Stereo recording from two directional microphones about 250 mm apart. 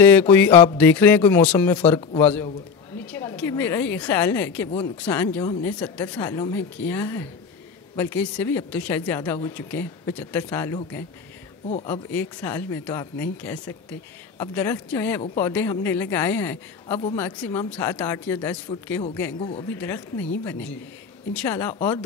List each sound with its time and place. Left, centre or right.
0.0 s a woman's voice: centre
5.0 s a woman's voice: centre